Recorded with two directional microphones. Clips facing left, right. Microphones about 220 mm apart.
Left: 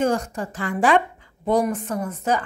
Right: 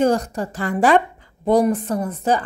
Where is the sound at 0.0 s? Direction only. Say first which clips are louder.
Right 4 dB; 35° right (ahead or behind).